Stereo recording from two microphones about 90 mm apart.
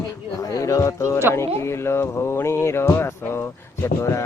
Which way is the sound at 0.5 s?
40° left (ahead or behind).